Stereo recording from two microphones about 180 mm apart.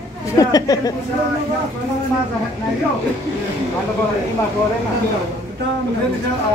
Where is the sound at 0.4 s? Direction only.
20° left (ahead or behind).